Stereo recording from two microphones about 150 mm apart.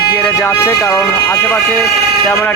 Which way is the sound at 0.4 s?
15° left (ahead or behind).